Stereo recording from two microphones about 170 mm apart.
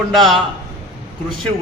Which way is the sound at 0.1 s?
Centre (ahead or behind).